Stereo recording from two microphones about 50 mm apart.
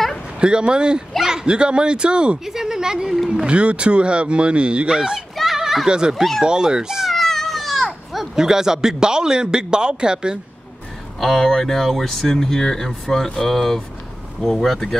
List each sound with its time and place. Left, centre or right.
0.4 s speech: centre
3.4 s speech: right
5.3 s children playing: centre
5.9 s speech: centre
7.2 s speech: centre
11.1 s speech: centre